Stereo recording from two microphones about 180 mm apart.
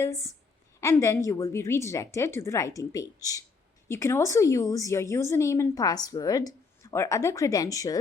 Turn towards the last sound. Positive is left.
turn(degrees=20)  # may be behind; listen again after turning